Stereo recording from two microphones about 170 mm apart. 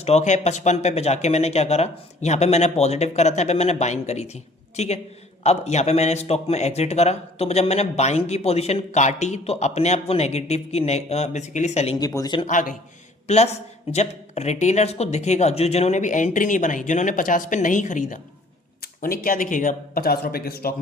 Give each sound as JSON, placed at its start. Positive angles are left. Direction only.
{"t": 0.0, "sound": "speech", "side_deg": 40}
{"t": 11.9, "sound": "speech", "side_deg": 20}
{"t": 12.5, "sound": "speech", "side_deg": 50}
{"t": 19.0, "sound": "speech", "side_deg": 60}